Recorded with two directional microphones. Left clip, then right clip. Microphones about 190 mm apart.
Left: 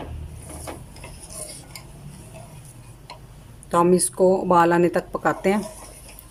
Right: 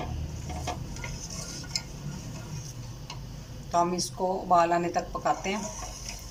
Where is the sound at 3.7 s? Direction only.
70° left (ahead or behind).